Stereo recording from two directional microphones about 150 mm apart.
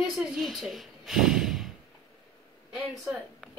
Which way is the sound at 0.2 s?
5° right (ahead or behind).